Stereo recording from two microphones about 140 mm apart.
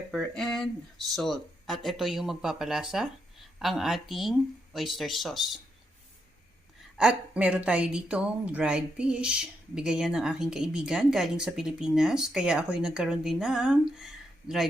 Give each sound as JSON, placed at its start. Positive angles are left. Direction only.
{"t": 0.1, "sound": "speech", "side_deg": 5}
{"t": 6.9, "sound": "a woman's voice", "side_deg": -5}
{"t": 13.9, "sound": "a sound", "side_deg": -5}